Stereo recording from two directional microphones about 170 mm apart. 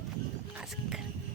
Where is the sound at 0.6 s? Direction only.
5° right (ahead or behind).